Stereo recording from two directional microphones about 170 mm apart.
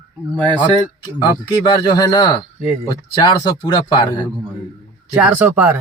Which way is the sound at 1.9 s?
25° left (ahead or behind).